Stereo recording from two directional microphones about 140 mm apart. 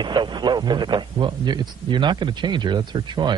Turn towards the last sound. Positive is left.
turn(degrees=-35)  # may be behind; listen again after turning